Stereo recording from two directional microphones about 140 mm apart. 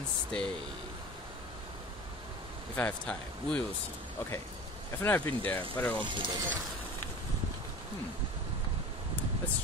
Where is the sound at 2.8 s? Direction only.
10° left (ahead or behind).